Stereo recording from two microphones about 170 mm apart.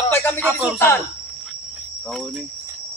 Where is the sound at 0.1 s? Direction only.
10° left (ahead or behind).